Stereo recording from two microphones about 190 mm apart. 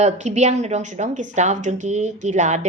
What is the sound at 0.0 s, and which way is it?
A woman's voice, 35° right (ahead or behind).